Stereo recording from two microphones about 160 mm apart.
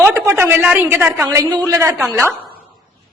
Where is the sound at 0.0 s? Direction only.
15° right (ahead or behind).